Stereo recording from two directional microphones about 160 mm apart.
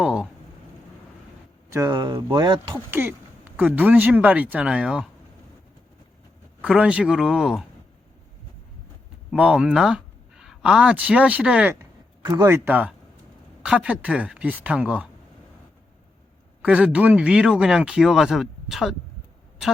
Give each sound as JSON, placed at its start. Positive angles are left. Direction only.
{"t": 0.0, "sound": "a sound", "side_deg": -5}
{"t": 1.7, "sound": "speech", "side_deg": -20}
{"t": 2.9, "sound": "speech", "side_deg": -15}
{"t": 6.6, "sound": "speech", "side_deg": -5}
{"t": 9.3, "sound": "speech", "side_deg": -5}
{"t": 11.8, "sound": "speech", "side_deg": -20}
{"t": 16.6, "sound": "speech", "side_deg": -10}